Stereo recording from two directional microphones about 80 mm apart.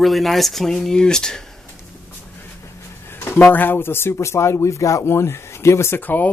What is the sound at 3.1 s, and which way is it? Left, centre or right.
Speech, left.